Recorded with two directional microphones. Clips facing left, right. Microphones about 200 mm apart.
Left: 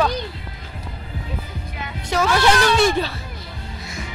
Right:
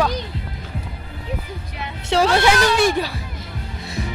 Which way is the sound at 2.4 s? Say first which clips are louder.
Even; 10° right (ahead or behind).